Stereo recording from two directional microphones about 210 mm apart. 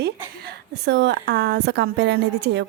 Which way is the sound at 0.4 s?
50° right (ahead or behind).